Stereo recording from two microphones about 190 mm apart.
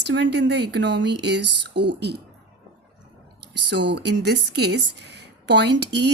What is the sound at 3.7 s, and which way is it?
Speech, 65° right (ahead or behind).